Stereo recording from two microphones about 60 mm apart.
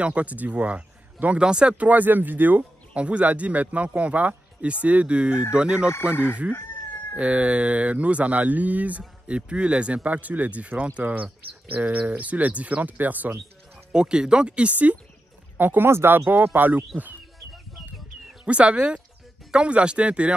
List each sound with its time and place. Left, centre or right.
0.0 s speech: right
2.9 s speech: right
7.2 s speech: right
13.9 s speech: centre
18.4 s speech: right